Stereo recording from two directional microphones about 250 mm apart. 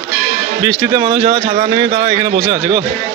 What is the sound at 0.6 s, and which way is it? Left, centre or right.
A man's voice, centre.